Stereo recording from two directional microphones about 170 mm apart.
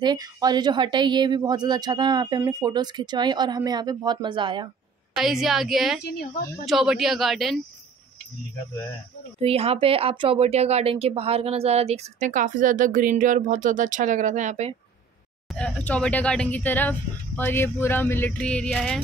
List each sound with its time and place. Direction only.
0.0 s a woman's voice: 25° right (ahead or behind)
5.1 s speech: centre (ahead or behind)
6.0 s a woman's voice: 65° left (ahead or behind)
6.6 s speech: centre (ahead or behind)
9.4 s speech: 35° right (ahead or behind)
15.5 s a sound: 5° left (ahead or behind)